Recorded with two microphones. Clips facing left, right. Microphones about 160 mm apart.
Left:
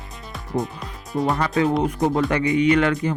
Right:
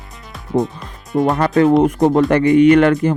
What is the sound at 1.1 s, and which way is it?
Speech, 90° right.